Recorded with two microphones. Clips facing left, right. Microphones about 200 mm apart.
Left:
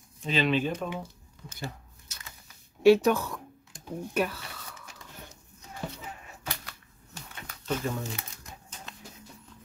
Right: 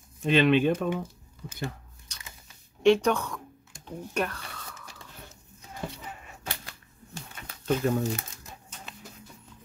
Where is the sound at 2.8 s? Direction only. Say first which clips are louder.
Left 2 dB; 5° left (ahead or behind).